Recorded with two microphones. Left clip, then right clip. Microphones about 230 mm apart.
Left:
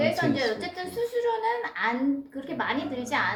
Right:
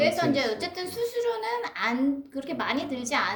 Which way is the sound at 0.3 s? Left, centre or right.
Right.